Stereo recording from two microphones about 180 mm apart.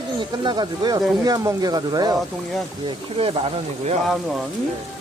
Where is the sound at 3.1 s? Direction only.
30° right (ahead or behind).